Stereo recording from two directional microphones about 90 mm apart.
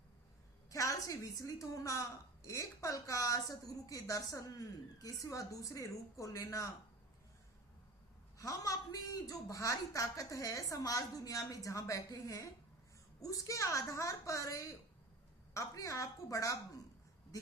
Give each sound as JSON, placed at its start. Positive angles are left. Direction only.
{"t": 0.7, "sound": "a woman's voice", "side_deg": 35}
{"t": 8.4, "sound": "a woman's voice", "side_deg": 40}